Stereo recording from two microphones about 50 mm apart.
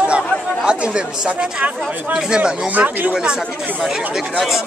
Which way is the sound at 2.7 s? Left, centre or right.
Right.